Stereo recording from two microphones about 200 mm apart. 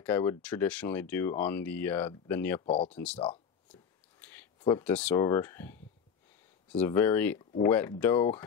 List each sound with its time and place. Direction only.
0.0 s speech: 10° left (ahead or behind)
2.6 s speech: 30° left (ahead or behind)
2.9 s speech: 5° left (ahead or behind)
4.2 s a sound: 10° left (ahead or behind)
5.2 s speech: 15° left (ahead or behind)
6.8 s speech: 10° left (ahead or behind)